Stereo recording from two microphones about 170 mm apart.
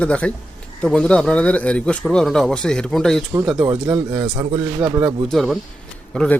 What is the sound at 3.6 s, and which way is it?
Speech, 15° right (ahead or behind).